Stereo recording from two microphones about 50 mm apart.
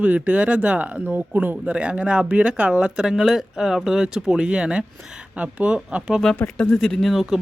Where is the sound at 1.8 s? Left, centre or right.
Right.